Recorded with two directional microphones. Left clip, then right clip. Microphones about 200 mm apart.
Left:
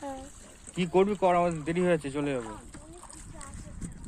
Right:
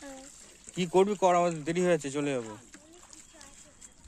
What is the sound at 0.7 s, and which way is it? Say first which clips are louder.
Speech: even; 35° right (ahead or behind).